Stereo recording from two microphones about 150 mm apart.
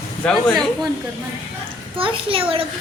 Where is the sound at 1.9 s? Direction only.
35° right (ahead or behind).